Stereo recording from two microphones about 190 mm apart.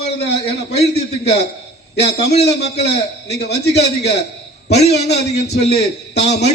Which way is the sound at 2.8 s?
60° left (ahead or behind).